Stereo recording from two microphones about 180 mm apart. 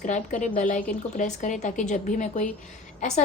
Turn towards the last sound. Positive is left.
turn(degrees=40)  # may be behind; listen again after turning